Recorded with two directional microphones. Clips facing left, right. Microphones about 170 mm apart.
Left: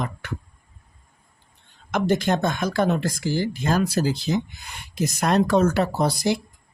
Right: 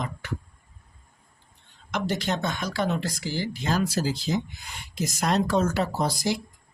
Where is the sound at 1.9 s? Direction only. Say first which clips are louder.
Left 6 dB; 50° left (ahead or behind).